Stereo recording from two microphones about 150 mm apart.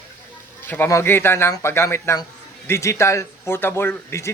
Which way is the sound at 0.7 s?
15° left (ahead or behind).